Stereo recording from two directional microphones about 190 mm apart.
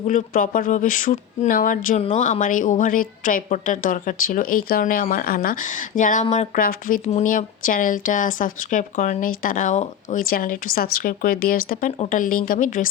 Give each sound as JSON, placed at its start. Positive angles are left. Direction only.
{"t": 0.1, "sound": "speech", "side_deg": 45}
{"t": 11.9, "sound": "speech", "side_deg": 40}